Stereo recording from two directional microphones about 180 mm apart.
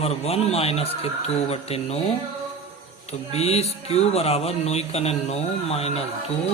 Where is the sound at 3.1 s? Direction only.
35° left (ahead or behind).